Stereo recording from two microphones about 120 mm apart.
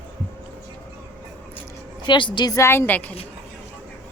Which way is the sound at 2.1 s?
40° left (ahead or behind).